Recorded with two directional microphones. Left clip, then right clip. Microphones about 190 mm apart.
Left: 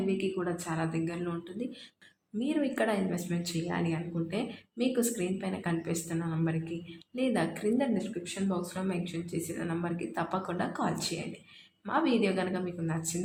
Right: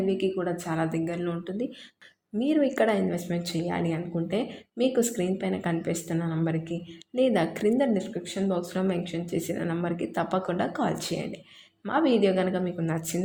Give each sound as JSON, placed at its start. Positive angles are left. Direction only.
{"t": 0.2, "sound": "speech", "side_deg": -30}